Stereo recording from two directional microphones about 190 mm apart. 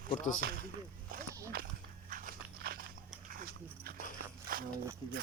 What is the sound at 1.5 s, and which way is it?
Walk, 50° right (ahead or behind).